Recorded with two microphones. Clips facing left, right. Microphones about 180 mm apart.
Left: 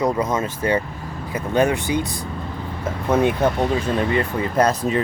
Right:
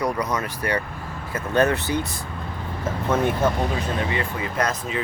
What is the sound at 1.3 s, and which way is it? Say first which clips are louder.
Speech: left 2 dB; 15° left (ahead or behind).